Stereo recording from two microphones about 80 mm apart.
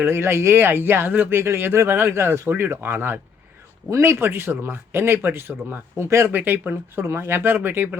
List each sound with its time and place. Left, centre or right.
0.0 s speech: right
3.8 s speech: right
6.3 s speech: right